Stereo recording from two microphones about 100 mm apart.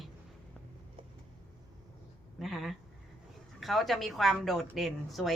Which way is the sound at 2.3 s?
Centre (ahead or behind).